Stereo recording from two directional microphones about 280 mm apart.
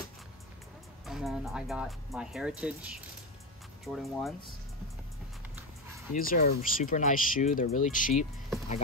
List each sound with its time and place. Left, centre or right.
1.0 s speech: centre
6.1 s speech: left